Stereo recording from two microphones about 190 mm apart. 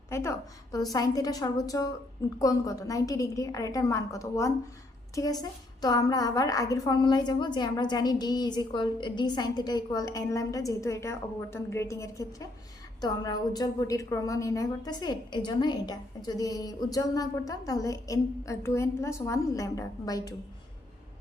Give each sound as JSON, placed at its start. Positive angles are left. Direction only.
{"t": 0.1, "sound": "a woman's voice", "side_deg": 15}